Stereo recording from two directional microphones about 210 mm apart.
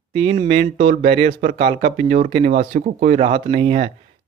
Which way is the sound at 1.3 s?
40° right (ahead or behind).